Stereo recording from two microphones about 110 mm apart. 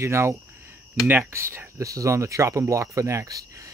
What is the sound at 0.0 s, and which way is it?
Speech, 25° right (ahead or behind).